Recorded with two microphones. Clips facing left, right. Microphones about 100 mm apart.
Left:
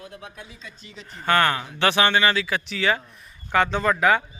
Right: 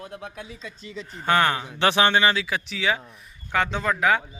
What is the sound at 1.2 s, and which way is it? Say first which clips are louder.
A man's voice: left 1 dB; 15° right (ahead or behind).